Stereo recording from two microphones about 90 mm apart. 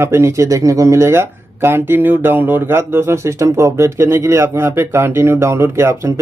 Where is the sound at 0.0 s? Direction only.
30° right (ahead or behind).